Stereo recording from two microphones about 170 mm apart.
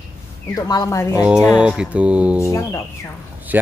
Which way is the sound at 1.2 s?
5° right (ahead or behind).